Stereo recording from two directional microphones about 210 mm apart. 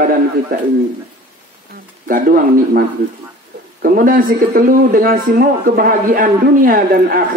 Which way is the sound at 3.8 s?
40° right (ahead or behind).